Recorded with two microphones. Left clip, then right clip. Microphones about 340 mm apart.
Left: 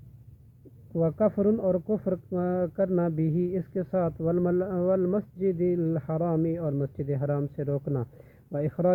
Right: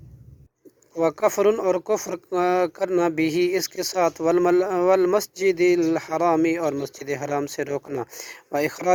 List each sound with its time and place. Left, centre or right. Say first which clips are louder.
1.0 s speech: right 6 dB; right